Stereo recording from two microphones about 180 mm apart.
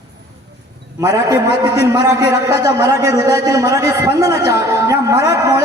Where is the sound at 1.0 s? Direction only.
15° right (ahead or behind).